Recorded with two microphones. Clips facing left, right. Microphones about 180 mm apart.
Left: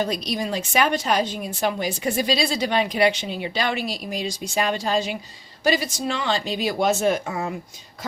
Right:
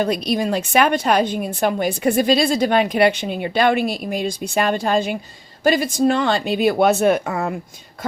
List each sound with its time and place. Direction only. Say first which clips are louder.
0.0 s a woman's voice: right 5 dB; 55° right (ahead or behind)